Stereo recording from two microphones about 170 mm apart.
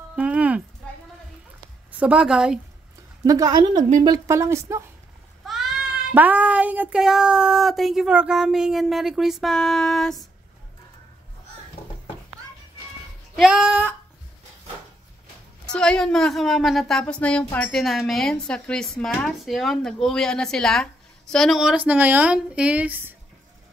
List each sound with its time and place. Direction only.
0.1 s a sound: 5° right (ahead or behind)
1.9 s a woman's voice: 5° right (ahead or behind)
3.3 s speech: 20° right (ahead or behind)
5.5 s a woman's voice: 5° right (ahead or behind)
13.4 s a woman's voice: 5° right (ahead or behind)
15.7 s a woman's voice: 5° left (ahead or behind)